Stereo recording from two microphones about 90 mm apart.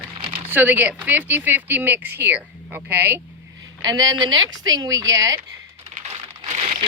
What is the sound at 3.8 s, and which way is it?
Speech, 45° right (ahead or behind).